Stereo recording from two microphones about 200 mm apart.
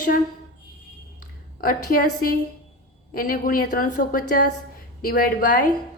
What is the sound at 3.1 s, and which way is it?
A woman's voice, 45° left (ahead or behind).